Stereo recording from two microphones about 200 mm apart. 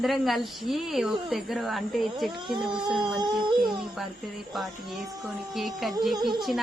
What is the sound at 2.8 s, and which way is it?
Speech, centre (ahead or behind).